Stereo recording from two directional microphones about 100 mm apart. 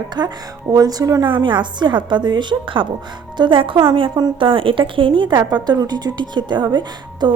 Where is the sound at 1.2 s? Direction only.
50° right (ahead or behind).